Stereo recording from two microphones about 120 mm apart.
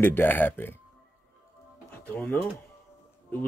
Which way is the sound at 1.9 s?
15° left (ahead or behind).